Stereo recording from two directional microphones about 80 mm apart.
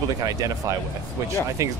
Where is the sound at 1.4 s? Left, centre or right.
Right.